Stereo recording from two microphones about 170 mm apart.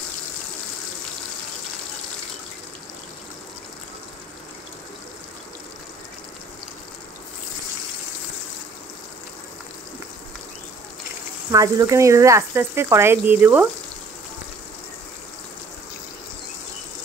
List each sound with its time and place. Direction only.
11.5 s speech: 20° right (ahead or behind)